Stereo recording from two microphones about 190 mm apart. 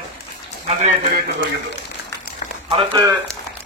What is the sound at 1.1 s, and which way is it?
Speech, 65° right (ahead or behind).